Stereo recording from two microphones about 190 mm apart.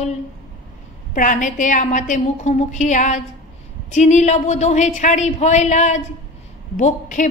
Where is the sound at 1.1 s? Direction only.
40° left (ahead or behind).